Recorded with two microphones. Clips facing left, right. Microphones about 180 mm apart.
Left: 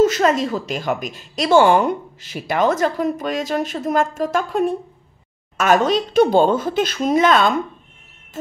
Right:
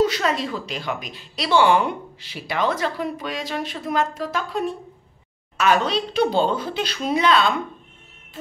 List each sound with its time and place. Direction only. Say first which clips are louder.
0.0 s speech: left 5 dB; 45° left (ahead or behind)